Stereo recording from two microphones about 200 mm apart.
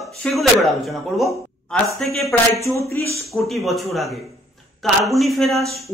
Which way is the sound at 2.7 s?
15° left (ahead or behind).